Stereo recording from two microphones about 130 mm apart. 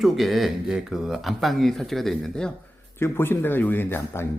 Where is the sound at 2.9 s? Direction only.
20° left (ahead or behind).